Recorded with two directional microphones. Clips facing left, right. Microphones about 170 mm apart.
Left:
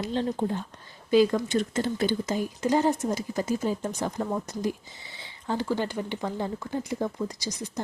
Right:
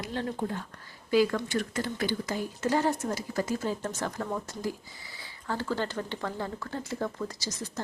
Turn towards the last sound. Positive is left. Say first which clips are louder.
# left 3 dB
turn(degrees=15)  # may be behind; listen again after turning